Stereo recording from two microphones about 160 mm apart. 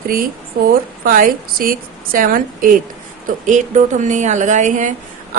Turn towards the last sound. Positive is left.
turn(degrees=-50)  # may be behind; listen again after turning